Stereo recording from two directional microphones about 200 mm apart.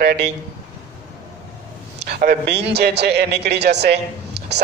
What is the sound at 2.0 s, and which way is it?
A man's voice, 55° right (ahead or behind).